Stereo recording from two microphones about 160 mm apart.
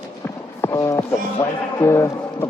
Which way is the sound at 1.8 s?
20° left (ahead or behind).